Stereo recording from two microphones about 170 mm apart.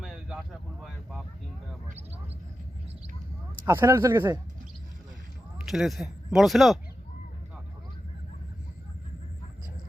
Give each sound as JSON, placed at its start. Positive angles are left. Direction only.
{"t": 0.0, "sound": "a sound", "side_deg": -5}
{"t": 3.7, "sound": "speech", "side_deg": -15}
{"t": 5.5, "sound": "speech", "side_deg": 0}